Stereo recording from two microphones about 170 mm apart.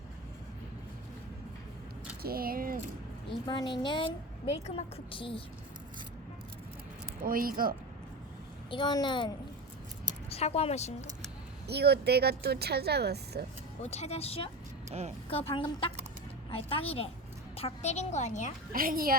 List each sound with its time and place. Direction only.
2.2 s speech: 60° right (ahead or behind)
3.2 s a woman's voice: 25° left (ahead or behind)
7.2 s speech: 55° right (ahead or behind)
8.7 s a child's voice: 25° left (ahead or behind)
11.7 s speech: 75° right (ahead or behind)
13.8 s a woman's voice: 40° left (ahead or behind)
14.8 s speech: 40° right (ahead or behind)
15.3 s a woman's voice: 35° left (ahead or behind)
18.7 s speech: 55° right (ahead or behind)